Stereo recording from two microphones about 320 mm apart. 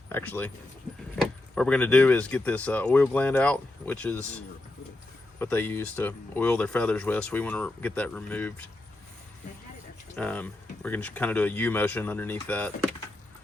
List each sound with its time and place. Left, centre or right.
0.1 s speech: centre
5.4 s speech: centre
10.2 s speech: centre